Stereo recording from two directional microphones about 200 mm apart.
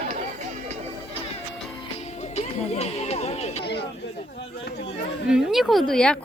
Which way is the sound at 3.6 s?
55° left (ahead or behind).